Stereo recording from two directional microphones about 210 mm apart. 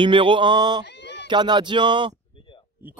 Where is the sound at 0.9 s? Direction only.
55° left (ahead or behind).